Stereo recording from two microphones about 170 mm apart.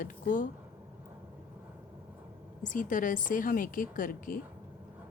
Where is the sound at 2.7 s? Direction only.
50° left (ahead or behind).